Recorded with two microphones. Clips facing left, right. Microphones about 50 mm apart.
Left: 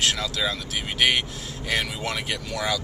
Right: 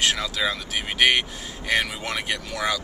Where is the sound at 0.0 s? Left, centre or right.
Centre.